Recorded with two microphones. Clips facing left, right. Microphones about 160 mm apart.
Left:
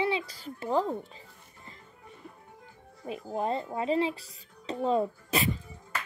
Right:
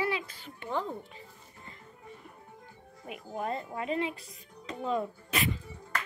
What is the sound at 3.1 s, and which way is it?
Speech, 30° left (ahead or behind).